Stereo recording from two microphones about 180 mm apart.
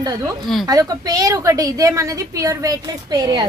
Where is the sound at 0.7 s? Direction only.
20° right (ahead or behind).